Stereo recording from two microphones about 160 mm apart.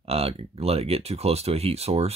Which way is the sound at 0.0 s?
40° right (ahead or behind).